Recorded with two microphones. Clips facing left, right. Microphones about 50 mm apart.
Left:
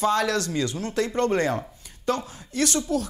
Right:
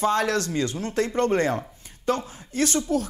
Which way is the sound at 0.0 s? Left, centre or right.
Right.